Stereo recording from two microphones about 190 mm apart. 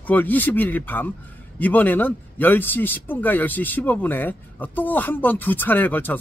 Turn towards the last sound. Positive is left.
turn(degrees=10)  # may be behind; listen again after turning